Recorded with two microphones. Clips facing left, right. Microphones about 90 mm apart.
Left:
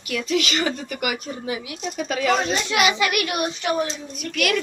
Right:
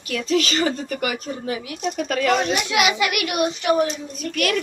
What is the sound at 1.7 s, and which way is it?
Speech, 60° right (ahead or behind).